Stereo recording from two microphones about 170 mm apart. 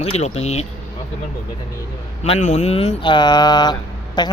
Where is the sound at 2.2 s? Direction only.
40° left (ahead or behind).